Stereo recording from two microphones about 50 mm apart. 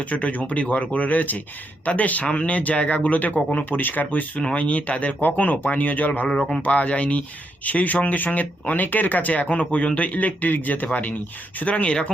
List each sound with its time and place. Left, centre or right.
0.0 s speech: left
4.4 s speech: left
11.6 s speech: left